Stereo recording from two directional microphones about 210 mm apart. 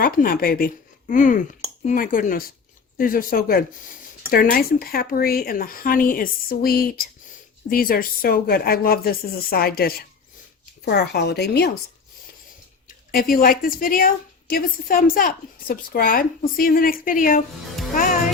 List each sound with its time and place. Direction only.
0.0 s a woman's voice: 45° left (ahead or behind)
13.1 s a woman's voice: 45° left (ahead or behind)